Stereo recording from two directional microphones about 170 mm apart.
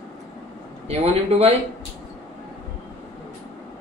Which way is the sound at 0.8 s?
35° right (ahead or behind).